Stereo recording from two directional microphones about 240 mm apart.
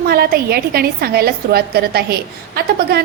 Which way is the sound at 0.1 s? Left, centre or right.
Right.